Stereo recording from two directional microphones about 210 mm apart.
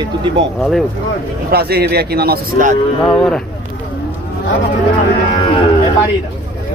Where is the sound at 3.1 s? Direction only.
5° left (ahead or behind).